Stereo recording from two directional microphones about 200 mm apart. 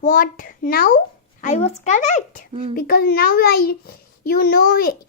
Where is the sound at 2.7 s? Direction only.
50° left (ahead or behind).